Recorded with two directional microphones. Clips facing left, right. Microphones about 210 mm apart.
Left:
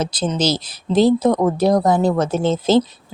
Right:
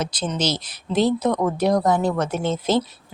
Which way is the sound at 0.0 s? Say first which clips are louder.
Left 4 dB; 30° left (ahead or behind).